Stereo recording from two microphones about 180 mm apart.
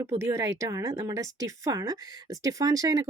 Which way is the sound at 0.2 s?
15° right (ahead or behind).